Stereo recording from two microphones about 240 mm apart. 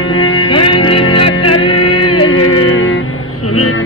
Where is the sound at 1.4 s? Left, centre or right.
Left.